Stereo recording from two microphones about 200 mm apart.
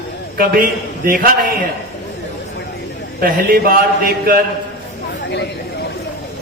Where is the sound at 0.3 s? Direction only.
45° right (ahead or behind).